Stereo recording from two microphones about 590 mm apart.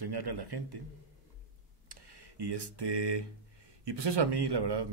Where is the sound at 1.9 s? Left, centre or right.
Right.